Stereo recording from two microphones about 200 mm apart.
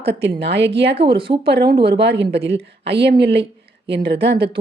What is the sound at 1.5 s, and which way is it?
A woman's voice, 50° right (ahead or behind).